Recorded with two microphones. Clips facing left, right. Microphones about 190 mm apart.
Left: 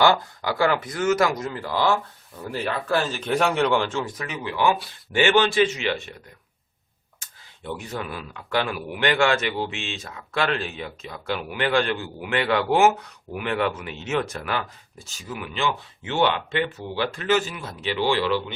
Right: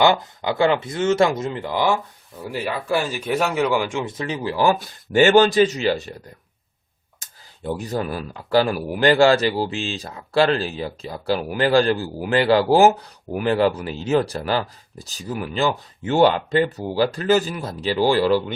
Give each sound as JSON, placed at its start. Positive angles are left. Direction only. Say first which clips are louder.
{"t": 0.0, "sound": "speech", "louder": "right 2 dB", "side_deg": -20}
{"t": 4.1, "sound": "speech", "louder": "right 5 dB", "side_deg": -30}
{"t": 7.2, "sound": "speech", "louder": "right 6 dB", "side_deg": -40}